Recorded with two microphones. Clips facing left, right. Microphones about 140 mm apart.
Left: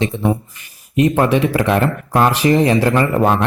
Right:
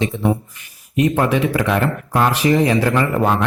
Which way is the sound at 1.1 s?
30° left (ahead or behind).